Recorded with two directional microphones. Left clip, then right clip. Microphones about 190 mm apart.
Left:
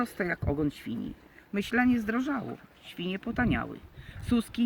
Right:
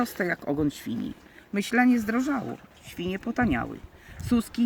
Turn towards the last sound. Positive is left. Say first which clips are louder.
# right 3 dB
turn(degrees=0)  # may be behind; listen again after turning